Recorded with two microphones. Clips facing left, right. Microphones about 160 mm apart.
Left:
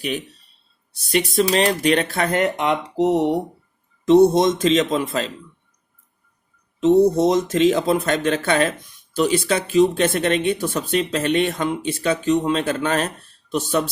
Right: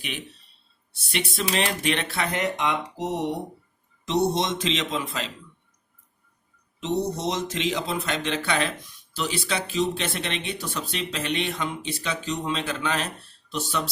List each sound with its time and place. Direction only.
0.9 s speech: 40° left (ahead or behind); by 3.3 s 65° left (ahead or behind)
4.0 s speech: 50° left (ahead or behind)
6.7 s speech: 50° left (ahead or behind)